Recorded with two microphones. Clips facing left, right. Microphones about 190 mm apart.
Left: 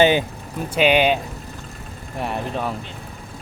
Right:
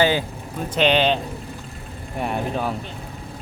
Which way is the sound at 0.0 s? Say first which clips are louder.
Left 3 dB; 20° left (ahead or behind).